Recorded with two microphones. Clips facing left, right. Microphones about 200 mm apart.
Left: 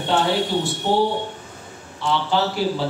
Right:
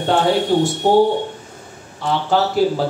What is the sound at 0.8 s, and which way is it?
A man's voice, 50° right (ahead or behind).